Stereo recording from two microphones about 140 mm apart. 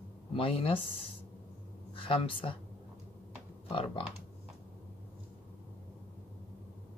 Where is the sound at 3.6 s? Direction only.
40° left (ahead or behind).